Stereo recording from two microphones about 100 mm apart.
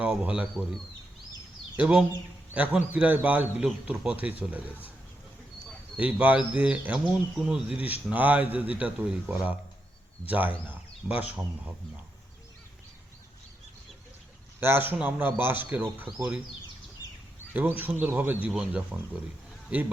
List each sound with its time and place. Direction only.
0.0 s a man's voice: 10° right (ahead or behind)
1.7 s a man's voice: 10° right (ahead or behind)
6.0 s a man's voice: 15° right (ahead or behind)
14.6 s speech: 20° right (ahead or behind)
17.5 s a man's voice: 20° right (ahead or behind)